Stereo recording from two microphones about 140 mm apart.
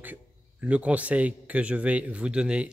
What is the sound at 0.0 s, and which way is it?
Speech, 10° right (ahead or behind).